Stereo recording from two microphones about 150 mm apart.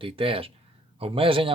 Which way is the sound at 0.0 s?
35° right (ahead or behind).